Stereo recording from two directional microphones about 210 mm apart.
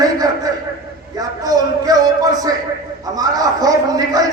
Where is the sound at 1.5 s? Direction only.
15° right (ahead or behind).